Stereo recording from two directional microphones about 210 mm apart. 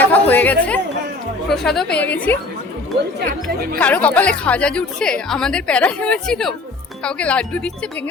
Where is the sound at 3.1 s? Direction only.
45° right (ahead or behind).